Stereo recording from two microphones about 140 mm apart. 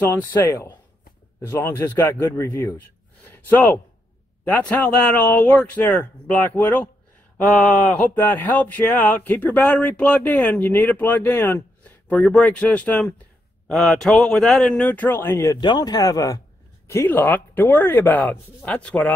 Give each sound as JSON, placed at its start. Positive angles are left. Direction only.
{"t": 0.1, "sound": "speech", "side_deg": 15}